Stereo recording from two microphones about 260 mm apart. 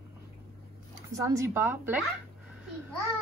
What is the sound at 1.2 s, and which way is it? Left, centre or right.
Speech, centre.